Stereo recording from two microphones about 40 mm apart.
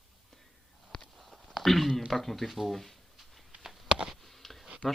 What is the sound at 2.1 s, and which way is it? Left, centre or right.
Speech, centre.